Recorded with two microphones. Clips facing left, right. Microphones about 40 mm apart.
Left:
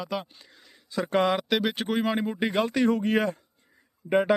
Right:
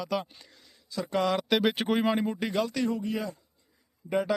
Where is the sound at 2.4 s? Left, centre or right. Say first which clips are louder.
Left 4 dB; left.